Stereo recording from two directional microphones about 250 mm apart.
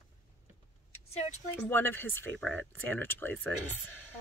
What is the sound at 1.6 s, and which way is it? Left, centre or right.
Speech, centre.